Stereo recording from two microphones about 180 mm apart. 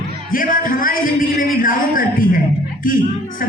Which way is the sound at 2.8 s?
50° left (ahead or behind).